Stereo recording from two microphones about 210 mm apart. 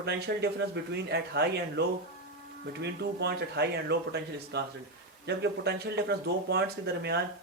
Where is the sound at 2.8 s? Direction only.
50° right (ahead or behind).